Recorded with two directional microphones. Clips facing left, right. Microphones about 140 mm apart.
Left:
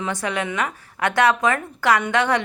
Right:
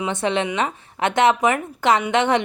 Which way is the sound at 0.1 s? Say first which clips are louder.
Right 4 dB; 25° right (ahead or behind).